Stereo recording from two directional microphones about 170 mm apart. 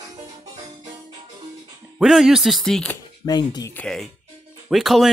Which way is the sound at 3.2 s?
25° left (ahead or behind).